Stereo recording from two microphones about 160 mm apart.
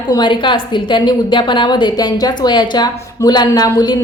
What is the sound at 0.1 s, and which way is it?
A woman's voice, 30° left (ahead or behind).